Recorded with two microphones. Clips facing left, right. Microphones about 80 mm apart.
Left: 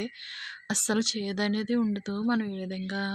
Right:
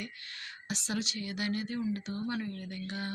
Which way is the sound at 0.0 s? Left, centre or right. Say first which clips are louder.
Left 7 dB; left.